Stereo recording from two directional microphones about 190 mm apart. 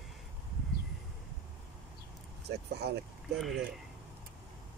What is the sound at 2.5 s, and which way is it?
Vehicle, 60° right (ahead or behind).